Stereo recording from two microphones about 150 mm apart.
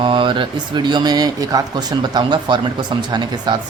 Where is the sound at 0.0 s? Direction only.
35° right (ahead or behind).